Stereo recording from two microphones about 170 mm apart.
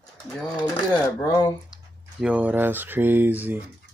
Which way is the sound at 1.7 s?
5° right (ahead or behind).